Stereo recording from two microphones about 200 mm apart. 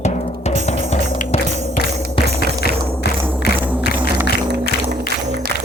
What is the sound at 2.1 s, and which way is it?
Music, 55° left (ahead or behind).